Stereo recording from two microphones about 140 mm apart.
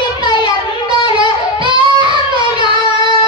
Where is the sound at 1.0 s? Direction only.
35° right (ahead or behind).